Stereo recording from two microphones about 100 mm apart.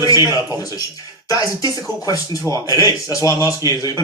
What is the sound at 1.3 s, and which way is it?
Speech, 40° left (ahead or behind).